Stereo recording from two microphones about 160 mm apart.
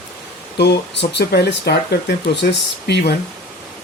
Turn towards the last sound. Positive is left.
turn(degrees=90)